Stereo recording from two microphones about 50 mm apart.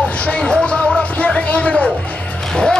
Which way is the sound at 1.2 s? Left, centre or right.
Left.